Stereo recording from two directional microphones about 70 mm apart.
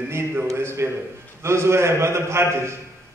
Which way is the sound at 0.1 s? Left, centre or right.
Right.